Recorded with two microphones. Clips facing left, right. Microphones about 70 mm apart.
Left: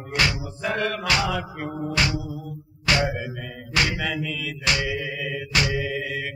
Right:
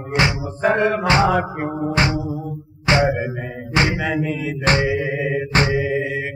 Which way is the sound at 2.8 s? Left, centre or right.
Right.